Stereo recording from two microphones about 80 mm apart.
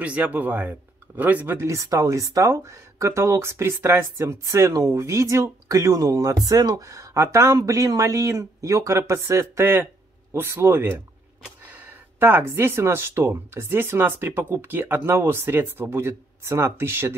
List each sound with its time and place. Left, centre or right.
0.0 s speech: centre
1.7 s speech: right